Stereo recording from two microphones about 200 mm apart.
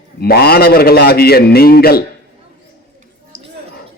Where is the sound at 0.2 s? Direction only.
50° left (ahead or behind).